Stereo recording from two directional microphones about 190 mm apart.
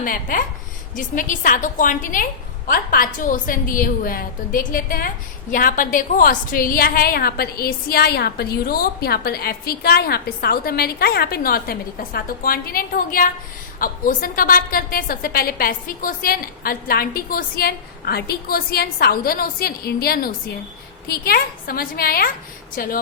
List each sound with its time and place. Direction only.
0.0 s a woman's voice: 45° left (ahead or behind)